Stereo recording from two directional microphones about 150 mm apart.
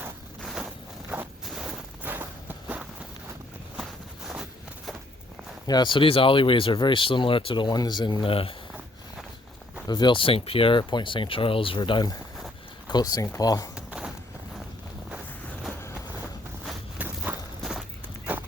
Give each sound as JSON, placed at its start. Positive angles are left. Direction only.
{"t": 0.4, "sound": "walk", "side_deg": -5}
{"t": 5.6, "sound": "speech", "side_deg": 30}
{"t": 9.8, "sound": "speech", "side_deg": 30}
{"t": 13.7, "sound": "a sound", "side_deg": -5}
{"t": 16.6, "sound": "walk", "side_deg": -10}
{"t": 17.6, "sound": "walk", "side_deg": 0}